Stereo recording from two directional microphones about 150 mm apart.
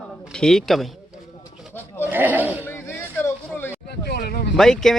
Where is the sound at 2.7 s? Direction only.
15° left (ahead or behind).